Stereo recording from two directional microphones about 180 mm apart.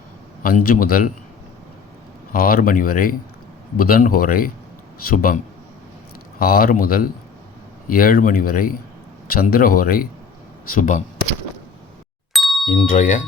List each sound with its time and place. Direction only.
0.4 s speech: 55° left (ahead or behind)
2.3 s speech: 55° left (ahead or behind)
6.4 s speech: 55° left (ahead or behind)
12.3 s ding: centre (ahead or behind)
12.6 s speech: 45° left (ahead or behind)